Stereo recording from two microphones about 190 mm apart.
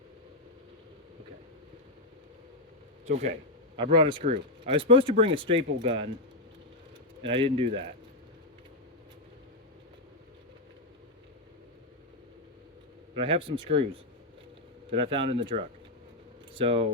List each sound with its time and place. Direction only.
3.1 s speech: 35° right (ahead or behind)
7.2 s speech: 30° right (ahead or behind)
13.1 s speech: 30° right (ahead or behind)
14.8 s speech: 30° right (ahead or behind)